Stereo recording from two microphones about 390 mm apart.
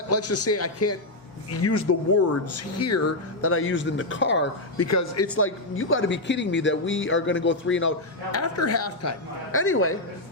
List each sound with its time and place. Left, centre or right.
0.1 s a man's voice: left
4.9 s a man's voice: left